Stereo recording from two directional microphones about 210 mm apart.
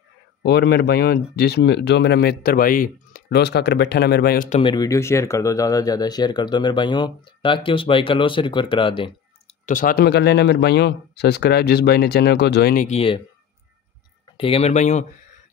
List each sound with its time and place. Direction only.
0.4 s speech: 50° left (ahead or behind)
4.6 s speech: 20° left (ahead or behind)
9.7 s speech: 40° left (ahead or behind)
14.2 s speech: 25° left (ahead or behind)